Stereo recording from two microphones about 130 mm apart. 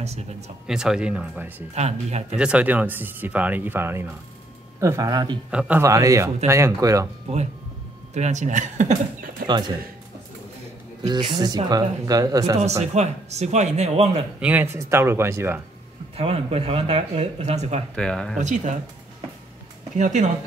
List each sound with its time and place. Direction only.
0.0 s speech: 55° right (ahead or behind)
0.7 s speech: 5° right (ahead or behind)
1.7 s speech: 55° right (ahead or behind)
2.3 s speech: 10° right (ahead or behind); by 5.4 s 35° right (ahead or behind)
5.5 s speech: 10° right (ahead or behind)
5.8 s speech: 25° right (ahead or behind)
7.3 s speech: 55° right (ahead or behind); by 9.5 s 80° right
11.1 s speech: 35° right (ahead or behind)
12.8 s speech: 60° right (ahead or behind)
14.4 s speech: 15° right (ahead or behind)
16.2 s speech: 50° right (ahead or behind)
17.9 s speech: 5° left (ahead or behind)
18.4 s speech: 70° right (ahead or behind)
20.0 s speech: 70° right (ahead or behind)